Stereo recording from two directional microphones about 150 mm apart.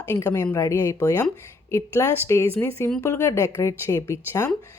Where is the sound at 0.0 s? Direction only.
15° left (ahead or behind).